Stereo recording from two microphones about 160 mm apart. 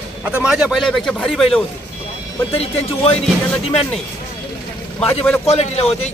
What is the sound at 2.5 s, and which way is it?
Speech, 40° left (ahead or behind).